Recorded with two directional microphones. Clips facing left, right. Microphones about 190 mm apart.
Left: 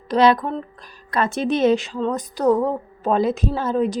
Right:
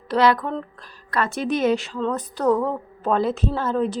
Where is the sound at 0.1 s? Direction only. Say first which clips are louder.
Left 2 dB; 20° left (ahead or behind).